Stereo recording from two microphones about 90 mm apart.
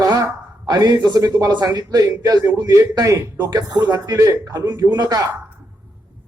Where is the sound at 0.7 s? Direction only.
45° right (ahead or behind).